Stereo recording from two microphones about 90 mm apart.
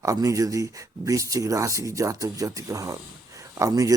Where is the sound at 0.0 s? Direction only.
35° right (ahead or behind).